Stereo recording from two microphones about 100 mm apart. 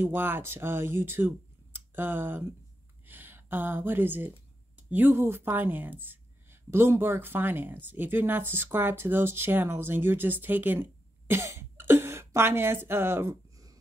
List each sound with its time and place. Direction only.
0.0 s speech: 20° right (ahead or behind)
4.8 s a sound: 15° right (ahead or behind)
5.1 s speech: 25° right (ahead or behind)